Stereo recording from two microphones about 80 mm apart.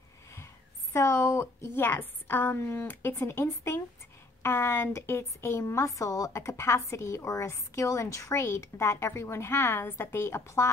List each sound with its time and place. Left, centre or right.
0.9 s a woman's voice: left